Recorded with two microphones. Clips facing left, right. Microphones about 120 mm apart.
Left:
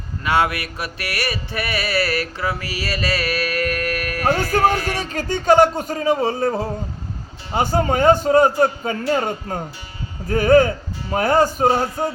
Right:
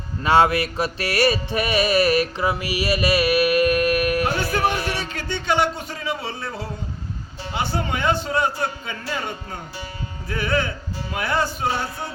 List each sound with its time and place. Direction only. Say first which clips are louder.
0.3 s music: right 3 dB; 30° right (ahead or behind)
4.9 s a man's voice: left 5 dB; 40° left (ahead or behind)